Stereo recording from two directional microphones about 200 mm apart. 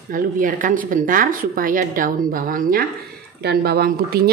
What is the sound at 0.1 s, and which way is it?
A woman's voice, 40° right (ahead or behind).